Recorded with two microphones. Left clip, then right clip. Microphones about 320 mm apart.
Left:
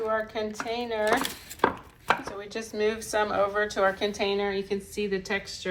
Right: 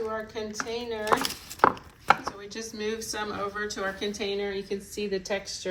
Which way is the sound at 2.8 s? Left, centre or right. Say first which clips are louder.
Left 6 dB; centre.